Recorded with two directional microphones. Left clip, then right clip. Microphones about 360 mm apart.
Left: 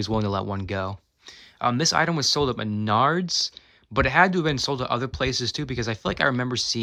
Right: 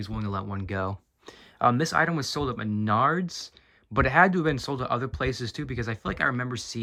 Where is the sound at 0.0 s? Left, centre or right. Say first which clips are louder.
Left 8 dB; centre.